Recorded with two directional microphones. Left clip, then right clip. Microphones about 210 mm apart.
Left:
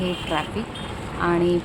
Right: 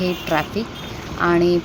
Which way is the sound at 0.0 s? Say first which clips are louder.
Right 4 dB; 15° right (ahead or behind).